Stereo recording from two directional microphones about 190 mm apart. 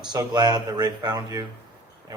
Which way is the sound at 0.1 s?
20° right (ahead or behind).